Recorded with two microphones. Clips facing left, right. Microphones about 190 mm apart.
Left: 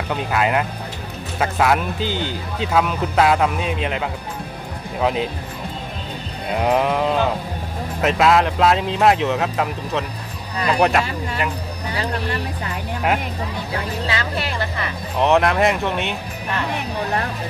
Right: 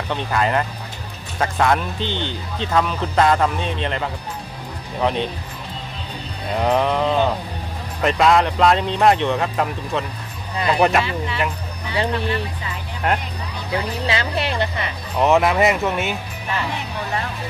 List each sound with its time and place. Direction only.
0.1 s speech: 5° left (ahead or behind)
6.5 s speech: 5° left (ahead or behind)
13.0 s speech: 5° left (ahead or behind)
14.0 s speech: 25° right (ahead or behind)
15.1 s speech: centre (ahead or behind)